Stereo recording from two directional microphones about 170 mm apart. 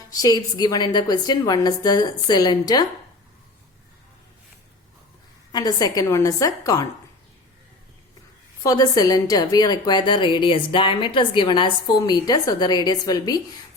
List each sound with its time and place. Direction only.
0.1 s a woman's voice: 20° left (ahead or behind)
5.5 s a woman's voice: 20° left (ahead or behind)
8.6 s a woman's voice: 20° left (ahead or behind)